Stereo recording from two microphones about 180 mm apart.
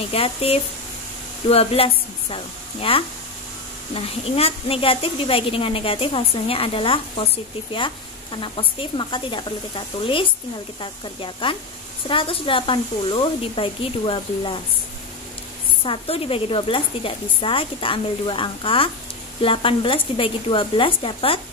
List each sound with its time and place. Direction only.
0.1 s a woman's voice: 30° left (ahead or behind)
15.8 s a woman's voice: 30° left (ahead or behind)